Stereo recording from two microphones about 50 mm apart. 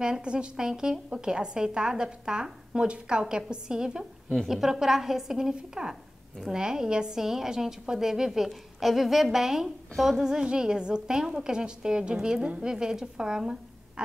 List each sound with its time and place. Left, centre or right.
0.0 s a woman's voice: centre
10.2 s a woman's voice: centre